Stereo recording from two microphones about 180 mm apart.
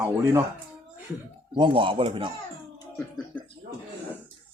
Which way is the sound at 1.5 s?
30° right (ahead or behind).